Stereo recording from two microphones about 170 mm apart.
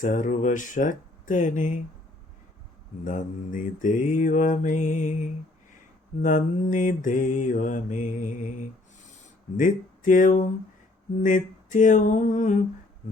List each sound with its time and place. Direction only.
0.0 s mantra: 50° left (ahead or behind)
3.0 s mantra: 50° left (ahead or behind)
9.6 s mantra: 50° left (ahead or behind)